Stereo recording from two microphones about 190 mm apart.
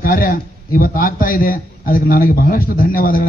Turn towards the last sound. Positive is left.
turn(degrees=50)  # may be behind; listen again after turning